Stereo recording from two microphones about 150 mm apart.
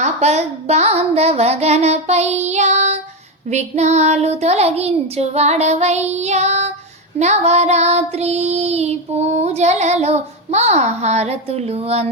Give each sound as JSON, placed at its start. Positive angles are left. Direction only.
{"t": 0.0, "sound": "child singing", "side_deg": -45}